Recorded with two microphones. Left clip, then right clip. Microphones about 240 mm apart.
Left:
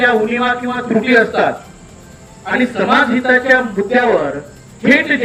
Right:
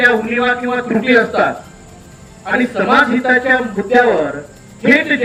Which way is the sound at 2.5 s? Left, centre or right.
Centre.